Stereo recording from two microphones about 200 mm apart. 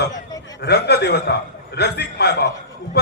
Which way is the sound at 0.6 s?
55° left (ahead or behind).